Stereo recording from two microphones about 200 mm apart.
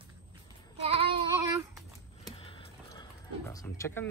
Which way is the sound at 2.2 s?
25° left (ahead or behind).